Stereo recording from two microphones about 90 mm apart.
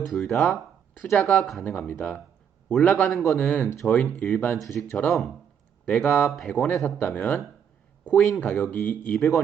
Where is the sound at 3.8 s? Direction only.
15° left (ahead or behind).